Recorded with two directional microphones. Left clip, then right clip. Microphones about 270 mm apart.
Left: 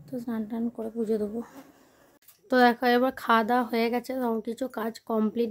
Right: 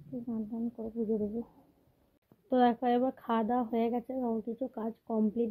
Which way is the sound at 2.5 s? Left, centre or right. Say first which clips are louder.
Left 6 dB; centre.